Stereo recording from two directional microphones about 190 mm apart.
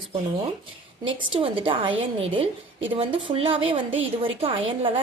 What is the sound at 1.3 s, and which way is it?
Speech, 25° right (ahead or behind).